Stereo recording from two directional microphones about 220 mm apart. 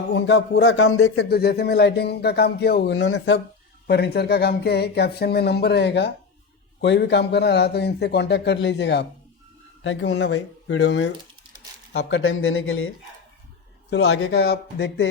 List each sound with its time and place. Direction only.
0.1 s speech: 55° left (ahead or behind)
3.8 s speech: 45° left (ahead or behind); by 12.9 s 65° left (ahead or behind)
13.9 s a man's voice: 70° left (ahead or behind)
14.3 s speech: 45° left (ahead or behind)